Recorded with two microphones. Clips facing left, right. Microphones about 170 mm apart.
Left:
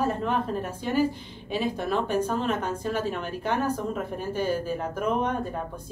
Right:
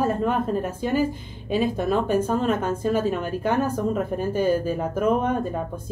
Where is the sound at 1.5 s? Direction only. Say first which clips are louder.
Right 5 dB; 50° right (ahead or behind).